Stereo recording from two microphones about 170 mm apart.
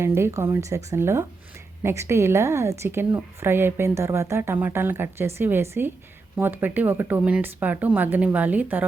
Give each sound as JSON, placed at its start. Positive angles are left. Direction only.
{"t": 0.0, "sound": "a woman's voice", "side_deg": -15}